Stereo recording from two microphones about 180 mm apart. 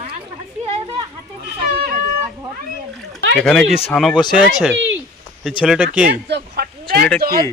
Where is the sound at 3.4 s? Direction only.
5° left (ahead or behind).